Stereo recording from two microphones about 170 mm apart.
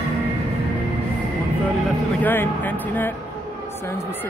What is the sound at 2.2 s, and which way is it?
Speech, 10° left (ahead or behind).